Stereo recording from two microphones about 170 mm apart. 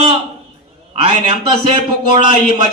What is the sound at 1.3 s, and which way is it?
Speech, 35° right (ahead or behind).